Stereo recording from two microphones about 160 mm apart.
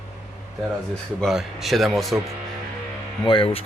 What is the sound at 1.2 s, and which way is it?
Speech, centre (ahead or behind).